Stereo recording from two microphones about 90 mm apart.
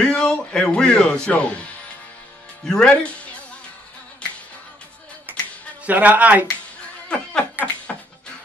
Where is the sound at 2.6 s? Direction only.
10° left (ahead or behind).